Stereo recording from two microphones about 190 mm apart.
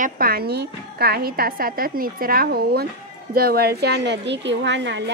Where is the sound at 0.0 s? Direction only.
50° right (ahead or behind).